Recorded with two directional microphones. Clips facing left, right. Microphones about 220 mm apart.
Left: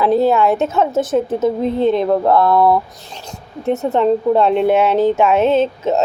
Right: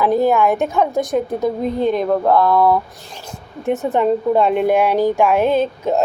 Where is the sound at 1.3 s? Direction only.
5° left (ahead or behind).